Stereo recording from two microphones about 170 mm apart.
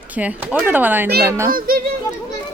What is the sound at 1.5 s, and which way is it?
Speech, 60° right (ahead or behind).